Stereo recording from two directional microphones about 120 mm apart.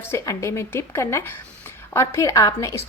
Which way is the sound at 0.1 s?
25° left (ahead or behind).